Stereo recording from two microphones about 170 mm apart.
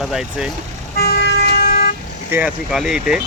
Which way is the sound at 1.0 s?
70° left (ahead or behind).